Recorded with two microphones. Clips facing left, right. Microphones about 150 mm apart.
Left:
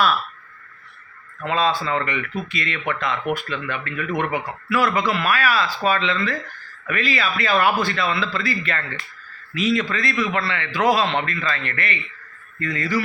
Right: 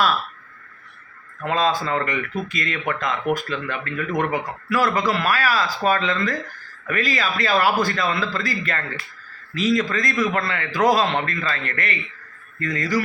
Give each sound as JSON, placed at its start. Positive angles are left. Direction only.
{"t": 1.5, "sound": "a man's voice", "side_deg": -45}